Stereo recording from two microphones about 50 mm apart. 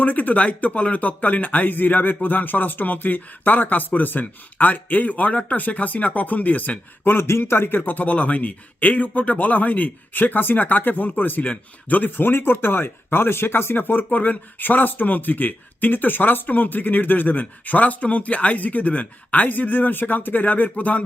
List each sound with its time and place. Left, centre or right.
0.0 s speech: left
7.5 s speech: left